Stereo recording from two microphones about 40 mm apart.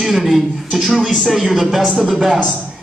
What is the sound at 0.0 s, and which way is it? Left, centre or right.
Speech, centre.